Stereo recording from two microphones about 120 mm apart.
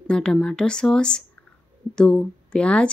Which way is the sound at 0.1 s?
5° left (ahead or behind).